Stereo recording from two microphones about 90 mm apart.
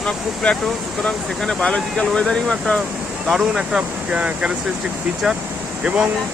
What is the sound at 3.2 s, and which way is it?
Speech, 5° right (ahead or behind).